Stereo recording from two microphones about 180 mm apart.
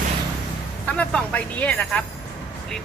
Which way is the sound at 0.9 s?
5° left (ahead or behind).